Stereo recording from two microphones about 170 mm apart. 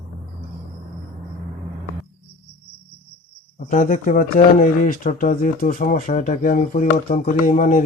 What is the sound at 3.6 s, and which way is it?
Speech, 50° left (ahead or behind).